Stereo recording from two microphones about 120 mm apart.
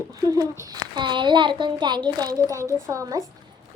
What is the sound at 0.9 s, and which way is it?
A child's voice, 40° right (ahead or behind).